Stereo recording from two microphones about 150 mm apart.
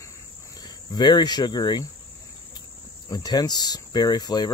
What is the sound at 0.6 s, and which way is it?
Speech, 30° left (ahead or behind).